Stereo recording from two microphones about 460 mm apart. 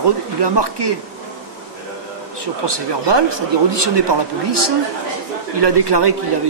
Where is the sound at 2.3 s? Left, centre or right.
Right.